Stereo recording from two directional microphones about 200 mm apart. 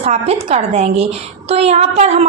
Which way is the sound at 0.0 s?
30° right (ahead or behind).